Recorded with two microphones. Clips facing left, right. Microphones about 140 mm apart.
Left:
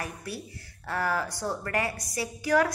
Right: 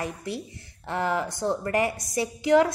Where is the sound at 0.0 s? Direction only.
20° right (ahead or behind).